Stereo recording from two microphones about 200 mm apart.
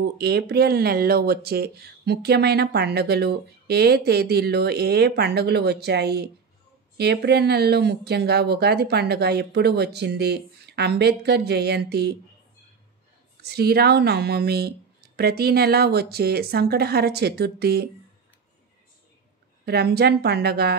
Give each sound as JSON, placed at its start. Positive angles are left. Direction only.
{"t": 0.2, "sound": "speech", "side_deg": -55}
{"t": 13.4, "sound": "speech", "side_deg": -55}
{"t": 19.6, "sound": "speech", "side_deg": -55}